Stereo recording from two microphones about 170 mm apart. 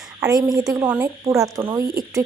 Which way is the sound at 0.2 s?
20° right (ahead or behind).